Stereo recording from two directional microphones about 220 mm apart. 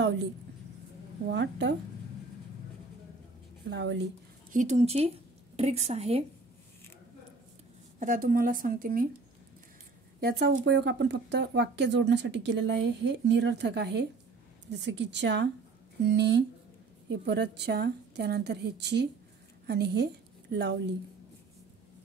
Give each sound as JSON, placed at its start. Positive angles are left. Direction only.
{"t": 1.3, "sound": "speech", "side_deg": -55}
{"t": 3.7, "sound": "speech", "side_deg": -55}
{"t": 4.5, "sound": "speech", "side_deg": -35}
{"t": 8.0, "sound": "speech", "side_deg": -40}
{"t": 10.2, "sound": "a woman's voice", "side_deg": -45}